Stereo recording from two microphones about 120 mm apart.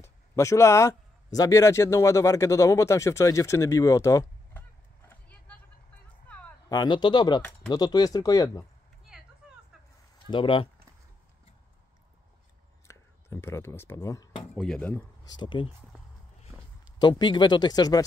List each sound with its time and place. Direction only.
0.0 s speech: 25° left (ahead or behind)
6.2 s a sound: 15° left (ahead or behind)
6.7 s speech: 35° left (ahead or behind)
9.1 s vehicle: 5° right (ahead or behind)
10.2 s speech: 45° left (ahead or behind)
12.8 s speech: 20° left (ahead or behind)
14.5 s speech: 5° left (ahead or behind)
15.2 s speech: 40° left (ahead or behind)
17.0 s speech: 40° left (ahead or behind)